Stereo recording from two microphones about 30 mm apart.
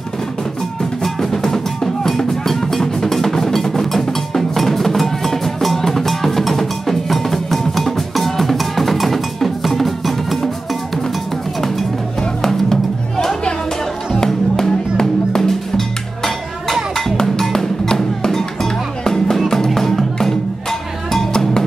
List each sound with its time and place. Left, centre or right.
1.0 s drum: centre
12.4 s music: centre
14.2 s music: centre
16.9 s music: centre